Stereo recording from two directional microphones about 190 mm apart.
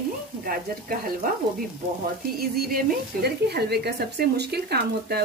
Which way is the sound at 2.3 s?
55° right (ahead or behind).